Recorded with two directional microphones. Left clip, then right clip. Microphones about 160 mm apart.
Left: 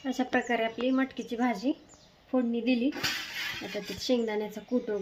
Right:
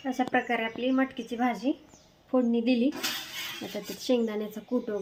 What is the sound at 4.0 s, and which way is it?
Speech, 15° right (ahead or behind).